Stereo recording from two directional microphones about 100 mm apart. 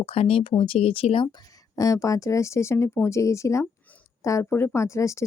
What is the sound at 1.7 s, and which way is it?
Speech, 35° left (ahead or behind).